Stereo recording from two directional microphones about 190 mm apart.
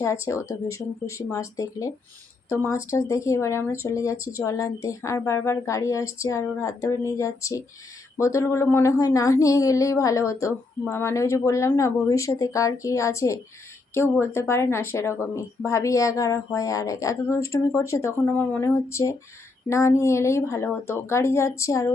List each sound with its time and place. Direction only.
0.0 s speech: 15° left (ahead or behind)